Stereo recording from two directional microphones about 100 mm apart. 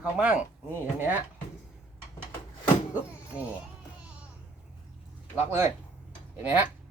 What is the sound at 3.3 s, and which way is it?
Speech, 10° right (ahead or behind).